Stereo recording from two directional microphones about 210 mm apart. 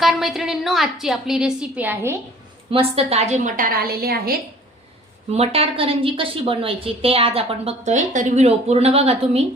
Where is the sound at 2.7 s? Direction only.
25° right (ahead or behind); by 4.3 s 45° right (ahead or behind).